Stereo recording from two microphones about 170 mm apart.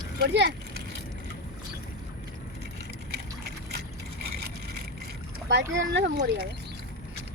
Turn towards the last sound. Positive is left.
turn(degrees=-90)